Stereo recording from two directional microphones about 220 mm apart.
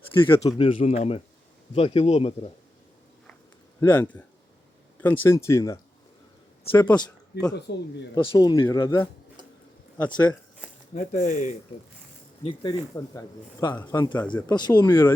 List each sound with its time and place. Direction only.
0.2 s speech: 20° left (ahead or behind)
3.8 s speech: 10° left (ahead or behind)
7.3 s speech: 45° left (ahead or behind)
8.1 s speech: 20° left (ahead or behind)
10.0 s speech: 5° left (ahead or behind)
10.9 s speech: 35° left (ahead or behind)
12.4 s speech: 20° left (ahead or behind)